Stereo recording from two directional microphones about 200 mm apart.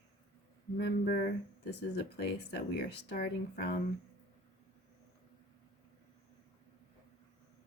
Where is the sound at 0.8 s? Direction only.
50° left (ahead or behind).